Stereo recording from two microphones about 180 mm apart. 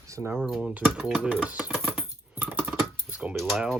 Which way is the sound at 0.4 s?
5° right (ahead or behind).